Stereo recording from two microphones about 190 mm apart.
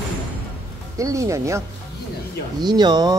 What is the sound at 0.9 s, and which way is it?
Speech, 15° right (ahead or behind).